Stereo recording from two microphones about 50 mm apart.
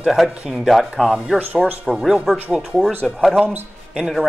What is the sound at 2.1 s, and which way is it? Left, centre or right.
Speech, centre.